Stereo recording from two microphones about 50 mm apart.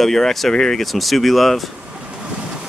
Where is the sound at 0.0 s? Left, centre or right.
Centre.